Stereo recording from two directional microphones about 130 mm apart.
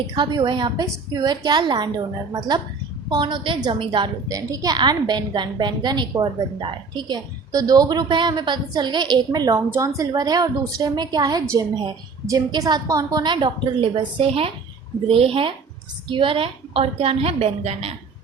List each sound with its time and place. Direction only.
0.1 s a woman's voice: 35° right (ahead or behind)
3.1 s a woman's voice: 35° right (ahead or behind)
4.3 s a woman's voice: 25° right (ahead or behind); by 17.9 s 50° right (ahead or behind)